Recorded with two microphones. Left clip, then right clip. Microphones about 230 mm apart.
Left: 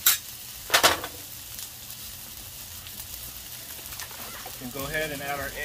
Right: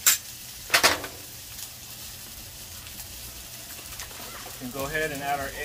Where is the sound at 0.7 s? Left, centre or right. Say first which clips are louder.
Even; left.